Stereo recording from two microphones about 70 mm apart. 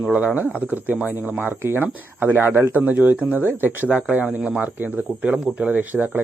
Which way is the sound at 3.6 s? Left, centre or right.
Right.